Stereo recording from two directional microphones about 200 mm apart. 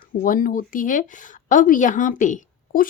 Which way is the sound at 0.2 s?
45° left (ahead or behind).